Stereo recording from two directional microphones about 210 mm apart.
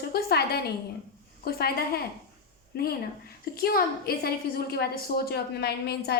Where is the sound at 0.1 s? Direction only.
50° left (ahead or behind).